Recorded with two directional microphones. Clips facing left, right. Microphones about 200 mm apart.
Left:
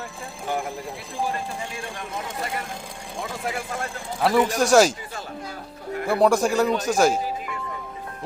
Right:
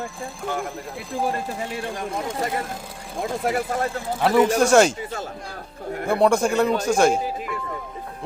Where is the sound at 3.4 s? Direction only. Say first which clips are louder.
Right 7 dB; 50° right (ahead or behind).